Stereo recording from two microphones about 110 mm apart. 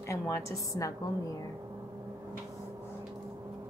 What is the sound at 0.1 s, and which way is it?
Speech, 25° left (ahead or behind).